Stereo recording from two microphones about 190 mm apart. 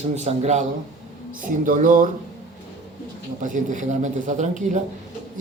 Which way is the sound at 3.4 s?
40° right (ahead or behind).